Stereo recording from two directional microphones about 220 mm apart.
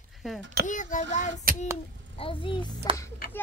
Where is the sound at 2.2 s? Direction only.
25° left (ahead or behind).